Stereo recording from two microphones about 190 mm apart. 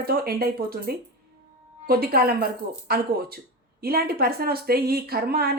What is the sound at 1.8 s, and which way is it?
Speech, 50° right (ahead or behind).